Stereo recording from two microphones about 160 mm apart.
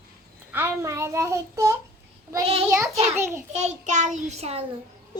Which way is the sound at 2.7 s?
15° right (ahead or behind).